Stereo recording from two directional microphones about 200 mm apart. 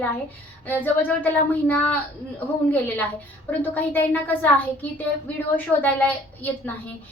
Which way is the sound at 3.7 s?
10° left (ahead or behind).